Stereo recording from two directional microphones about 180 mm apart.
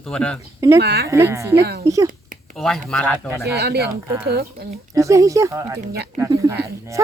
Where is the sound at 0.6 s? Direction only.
15° right (ahead or behind).